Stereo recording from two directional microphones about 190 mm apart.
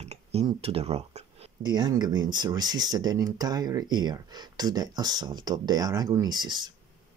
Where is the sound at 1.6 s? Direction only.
20° right (ahead or behind).